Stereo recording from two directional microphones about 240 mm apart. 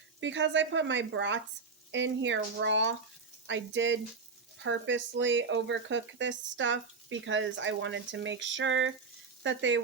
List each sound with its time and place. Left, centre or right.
0.2 s speech: right